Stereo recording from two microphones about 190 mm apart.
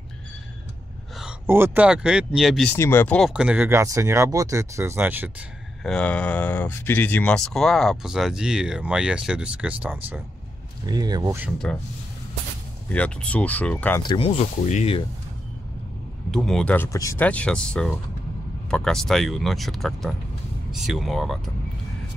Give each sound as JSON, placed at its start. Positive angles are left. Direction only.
{"t": 1.2, "sound": "speech", "side_deg": -10}
{"t": 3.2, "sound": "speech", "side_deg": -5}
{"t": 5.9, "sound": "speech", "side_deg": 5}
{"t": 10.9, "sound": "speech", "side_deg": -20}
{"t": 11.5, "sound": "speech", "side_deg": 5}
{"t": 12.9, "sound": "speech", "side_deg": 5}
{"t": 14.0, "sound": "speech", "side_deg": 30}
{"t": 16.3, "sound": "speech", "side_deg": 5}